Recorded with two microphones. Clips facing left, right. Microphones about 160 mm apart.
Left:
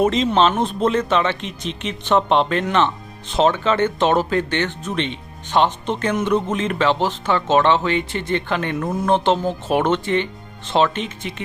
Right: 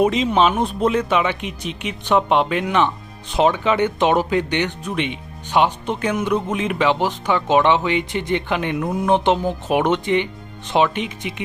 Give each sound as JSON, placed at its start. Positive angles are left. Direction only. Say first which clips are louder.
{"t": 0.0, "sound": "speech", "louder": "even", "side_deg": -10}